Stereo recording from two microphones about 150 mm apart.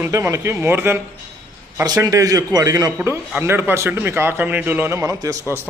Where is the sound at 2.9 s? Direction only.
15° right (ahead or behind).